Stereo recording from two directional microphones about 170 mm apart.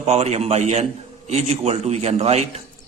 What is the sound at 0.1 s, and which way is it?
Speech, 40° right (ahead or behind).